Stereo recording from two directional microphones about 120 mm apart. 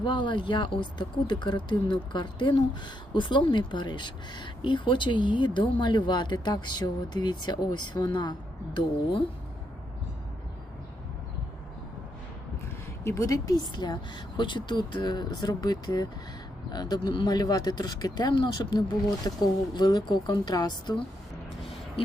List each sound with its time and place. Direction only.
0.0 s speech: 40° left (ahead or behind)
12.6 s speech: 25° left (ahead or behind)